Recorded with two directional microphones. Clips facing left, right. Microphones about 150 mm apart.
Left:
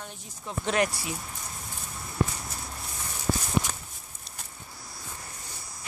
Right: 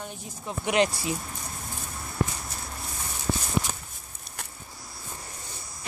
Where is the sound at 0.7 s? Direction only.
25° right (ahead or behind).